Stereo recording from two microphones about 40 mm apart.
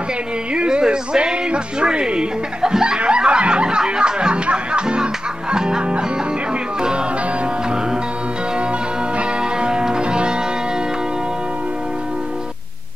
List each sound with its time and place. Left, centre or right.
0.6 s music: right
9.6 s music: right